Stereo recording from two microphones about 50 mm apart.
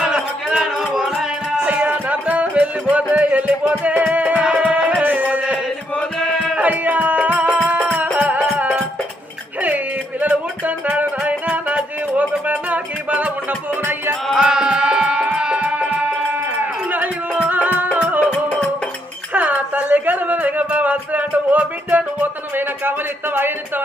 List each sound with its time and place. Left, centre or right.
0.0 s a sound: centre
0.5 s music: centre
1.6 s music: right
5.0 s music: right
6.1 s music: centre
6.6 s music: right
13.8 s music: right
14.3 s music: centre
16.9 s music: right
19.3 s music: right